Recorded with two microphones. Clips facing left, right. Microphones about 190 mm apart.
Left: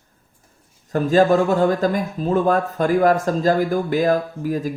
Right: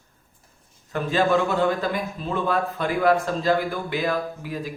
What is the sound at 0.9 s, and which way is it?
Speech, 40° left (ahead or behind).